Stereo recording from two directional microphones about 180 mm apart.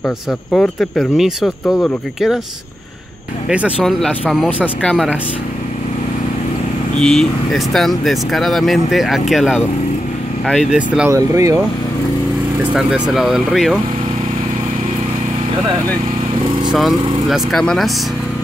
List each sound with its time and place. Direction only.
0.0 s speech: 5° left (ahead or behind)
3.4 s speech: 5° right (ahead or behind)
7.0 s speech: centre (ahead or behind)
10.7 s speech: 5° right (ahead or behind)
11.1 s speech: 20° right (ahead or behind)
13.1 s speech: centre (ahead or behind)
16.7 s speech: centre (ahead or behind)